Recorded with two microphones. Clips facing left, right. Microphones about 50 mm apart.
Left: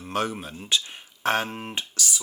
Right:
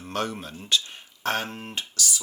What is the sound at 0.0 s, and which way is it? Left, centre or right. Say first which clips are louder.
Speech: left 2 dB; centre.